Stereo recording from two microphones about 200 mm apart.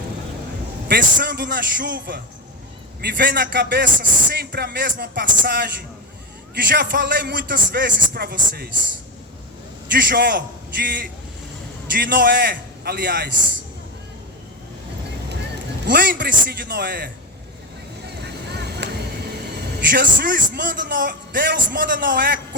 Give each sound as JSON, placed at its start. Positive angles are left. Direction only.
{"t": 0.9, "sound": "a man's voice", "side_deg": -55}
{"t": 9.9, "sound": "speech", "side_deg": -55}
{"t": 15.9, "sound": "speech", "side_deg": -50}
{"t": 18.0, "sound": "vehicle", "side_deg": -55}
{"t": 19.8, "sound": "speech", "side_deg": -50}